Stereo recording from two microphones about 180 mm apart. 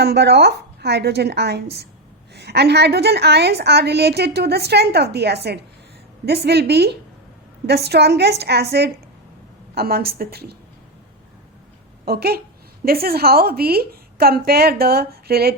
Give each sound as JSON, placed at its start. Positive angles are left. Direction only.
{"t": 0.0, "sound": "a woman's voice", "side_deg": -65}
{"t": 12.0, "sound": "a woman's voice", "side_deg": -60}